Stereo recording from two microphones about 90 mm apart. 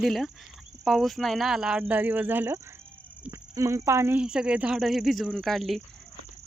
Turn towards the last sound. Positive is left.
turn(degrees=0)  # may be behind; listen again after turning